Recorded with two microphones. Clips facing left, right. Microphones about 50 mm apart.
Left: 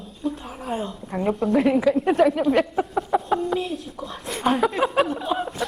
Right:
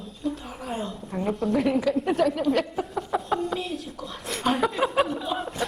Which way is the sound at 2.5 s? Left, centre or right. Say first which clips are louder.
Left 5 dB; left.